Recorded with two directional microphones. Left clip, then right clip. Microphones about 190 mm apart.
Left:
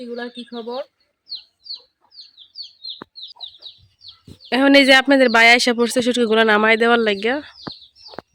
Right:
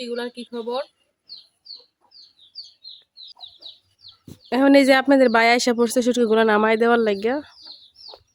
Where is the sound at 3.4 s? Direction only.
30° left (ahead or behind).